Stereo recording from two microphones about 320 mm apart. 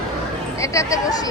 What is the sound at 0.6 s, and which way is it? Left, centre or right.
Speech, centre.